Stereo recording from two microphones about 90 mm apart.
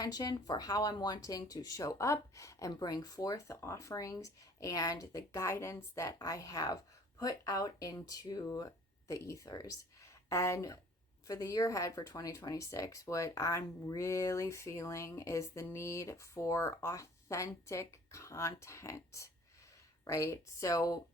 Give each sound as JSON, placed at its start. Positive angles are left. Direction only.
{"t": 0.0, "sound": "speech", "side_deg": 45}